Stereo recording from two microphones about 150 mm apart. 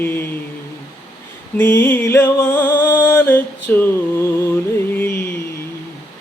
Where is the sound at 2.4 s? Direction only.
15° left (ahead or behind).